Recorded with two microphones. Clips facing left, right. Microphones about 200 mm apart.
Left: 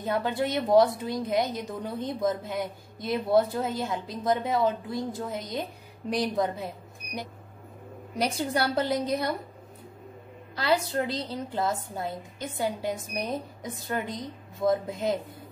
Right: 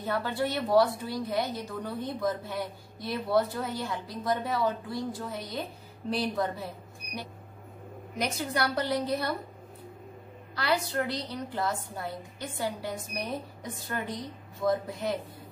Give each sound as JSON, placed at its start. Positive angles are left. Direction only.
{"t": 0.0, "sound": "a woman's voice", "side_deg": 20}
{"t": 8.2, "sound": "a woman's voice", "side_deg": 30}
{"t": 10.5, "sound": "a woman's voice", "side_deg": 25}